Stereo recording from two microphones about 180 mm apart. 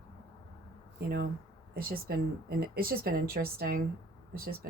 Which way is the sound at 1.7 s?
55° right (ahead or behind).